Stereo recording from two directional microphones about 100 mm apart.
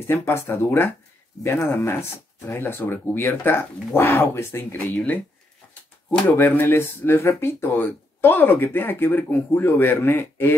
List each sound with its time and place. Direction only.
0.0 s speech: 25° left (ahead or behind)